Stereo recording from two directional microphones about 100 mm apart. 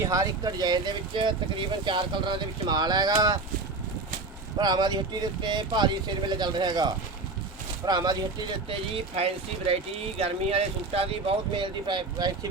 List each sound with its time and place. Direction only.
0.0 s speech: 35° right (ahead or behind)
4.5 s speech: 45° right (ahead or behind)
8.7 s speech: 80° right; by 12.5 s 50° right (ahead or behind)